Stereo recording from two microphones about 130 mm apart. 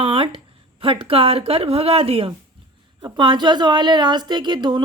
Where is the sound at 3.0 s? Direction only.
35° right (ahead or behind).